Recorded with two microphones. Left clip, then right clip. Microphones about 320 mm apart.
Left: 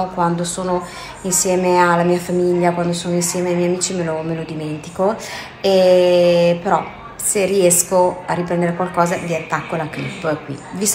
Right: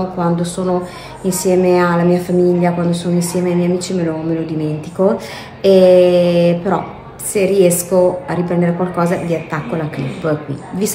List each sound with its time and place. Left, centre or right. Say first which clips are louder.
0.2 s speech: right 2 dB; centre